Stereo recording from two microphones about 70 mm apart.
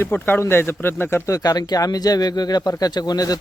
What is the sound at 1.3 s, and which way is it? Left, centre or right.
Speech, left.